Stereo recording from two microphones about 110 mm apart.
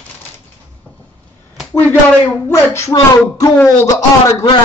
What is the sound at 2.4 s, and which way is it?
Speech, 25° left (ahead or behind).